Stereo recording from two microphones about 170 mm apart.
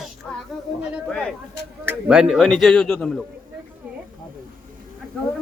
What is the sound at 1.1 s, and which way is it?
Speech, 5° left (ahead or behind).